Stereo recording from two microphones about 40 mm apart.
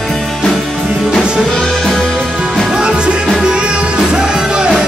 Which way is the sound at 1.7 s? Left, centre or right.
Centre.